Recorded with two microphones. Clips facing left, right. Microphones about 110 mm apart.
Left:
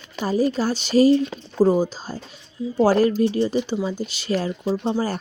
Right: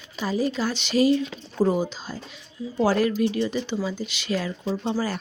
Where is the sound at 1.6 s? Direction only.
10° left (ahead or behind).